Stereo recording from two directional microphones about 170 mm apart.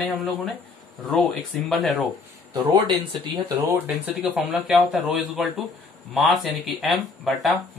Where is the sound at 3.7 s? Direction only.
10° right (ahead or behind).